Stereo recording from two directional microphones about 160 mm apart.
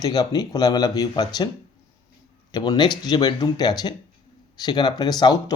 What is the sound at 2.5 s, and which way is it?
Speech, 25° left (ahead or behind).